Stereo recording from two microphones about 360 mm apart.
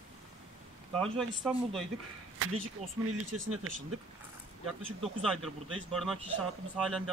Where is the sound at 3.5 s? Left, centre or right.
Right.